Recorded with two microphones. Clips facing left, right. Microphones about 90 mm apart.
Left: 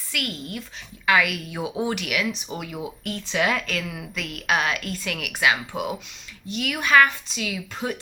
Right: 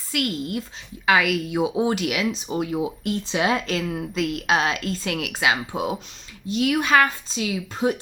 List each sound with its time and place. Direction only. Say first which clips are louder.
0.1 s a woman's voice: right 6 dB; 25° right (ahead or behind)